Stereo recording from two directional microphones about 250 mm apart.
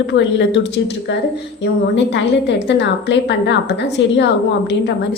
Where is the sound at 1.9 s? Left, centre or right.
Left.